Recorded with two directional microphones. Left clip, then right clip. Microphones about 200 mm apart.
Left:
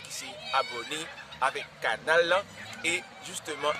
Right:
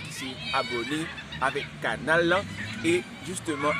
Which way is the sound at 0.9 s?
25° left (ahead or behind).